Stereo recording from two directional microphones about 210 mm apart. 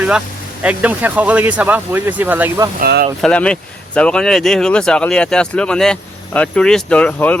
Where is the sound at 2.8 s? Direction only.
45° right (ahead or behind).